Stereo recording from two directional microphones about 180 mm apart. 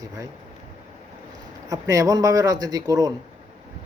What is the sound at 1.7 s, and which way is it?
A man's voice, 20° right (ahead or behind).